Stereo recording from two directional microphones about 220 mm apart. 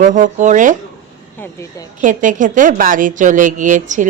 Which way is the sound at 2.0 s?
35° right (ahead or behind).